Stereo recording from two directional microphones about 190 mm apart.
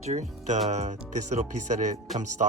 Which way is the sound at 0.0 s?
40° right (ahead or behind).